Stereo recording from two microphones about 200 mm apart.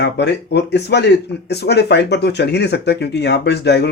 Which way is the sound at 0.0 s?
55° left (ahead or behind).